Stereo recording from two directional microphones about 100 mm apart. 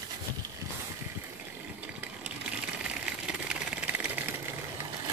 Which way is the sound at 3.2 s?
10° right (ahead or behind).